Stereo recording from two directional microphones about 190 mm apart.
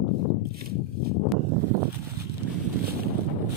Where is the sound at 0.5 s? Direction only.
55° right (ahead or behind).